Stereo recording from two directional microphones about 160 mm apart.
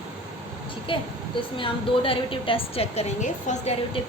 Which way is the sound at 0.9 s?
35° left (ahead or behind).